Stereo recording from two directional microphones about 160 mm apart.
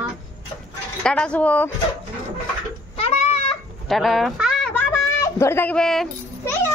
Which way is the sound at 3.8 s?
Centre (ahead or behind).